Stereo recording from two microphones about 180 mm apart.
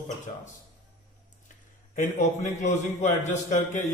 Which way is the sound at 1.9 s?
45° left (ahead or behind).